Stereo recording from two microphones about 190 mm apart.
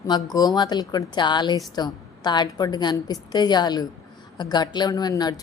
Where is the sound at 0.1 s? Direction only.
20° left (ahead or behind).